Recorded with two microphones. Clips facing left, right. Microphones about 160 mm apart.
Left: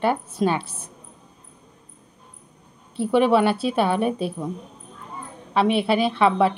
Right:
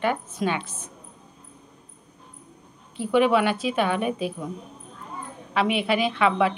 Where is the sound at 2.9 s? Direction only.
35° left (ahead or behind).